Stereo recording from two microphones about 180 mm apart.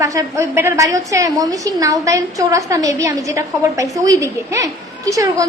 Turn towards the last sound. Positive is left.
turn(degrees=-20)  # may be behind; listen again after turning